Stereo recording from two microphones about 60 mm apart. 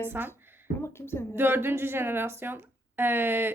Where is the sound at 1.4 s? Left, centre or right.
Right.